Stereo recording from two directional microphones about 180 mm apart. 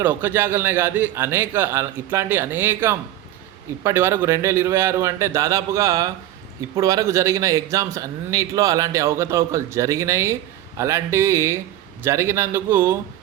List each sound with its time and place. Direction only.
0.0 s a man's voice: 10° right (ahead or behind)